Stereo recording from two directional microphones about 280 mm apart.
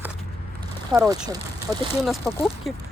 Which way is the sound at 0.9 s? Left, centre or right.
Centre.